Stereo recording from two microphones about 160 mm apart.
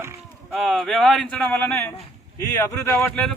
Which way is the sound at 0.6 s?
Centre (ahead or behind).